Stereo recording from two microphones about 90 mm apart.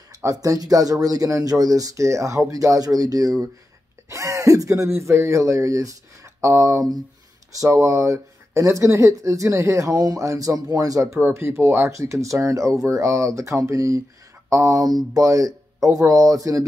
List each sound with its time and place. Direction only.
0.1 s speech: 40° right (ahead or behind)